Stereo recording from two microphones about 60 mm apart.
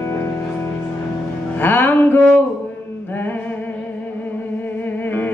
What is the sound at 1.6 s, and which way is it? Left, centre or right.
Music, left.